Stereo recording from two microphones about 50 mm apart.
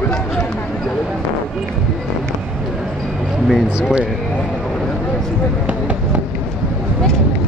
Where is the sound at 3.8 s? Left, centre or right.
Centre.